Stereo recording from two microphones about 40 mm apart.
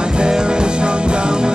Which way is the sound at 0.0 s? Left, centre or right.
Right.